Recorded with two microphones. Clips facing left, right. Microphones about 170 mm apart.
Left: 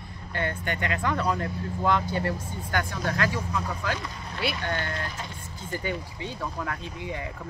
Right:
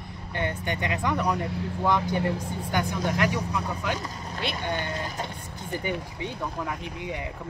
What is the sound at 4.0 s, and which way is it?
Vehicle, 40° right (ahead or behind).